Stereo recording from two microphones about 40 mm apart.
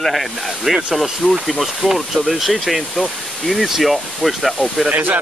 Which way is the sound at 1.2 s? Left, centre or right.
Centre.